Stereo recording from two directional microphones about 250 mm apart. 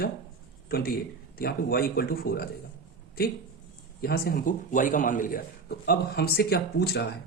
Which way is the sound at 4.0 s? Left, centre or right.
Left.